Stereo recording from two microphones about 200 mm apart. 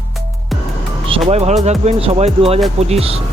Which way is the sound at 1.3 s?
35° right (ahead or behind).